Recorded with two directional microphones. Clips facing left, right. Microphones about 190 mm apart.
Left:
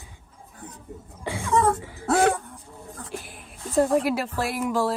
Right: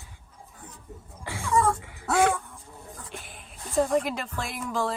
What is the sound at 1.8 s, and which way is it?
Music, 35° left (ahead or behind).